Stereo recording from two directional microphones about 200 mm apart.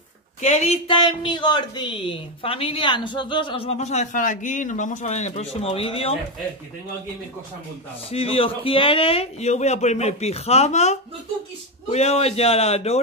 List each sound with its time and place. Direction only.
0.4 s a man's voice: 35° left (ahead or behind)
8.1 s speech: 30° left (ahead or behind)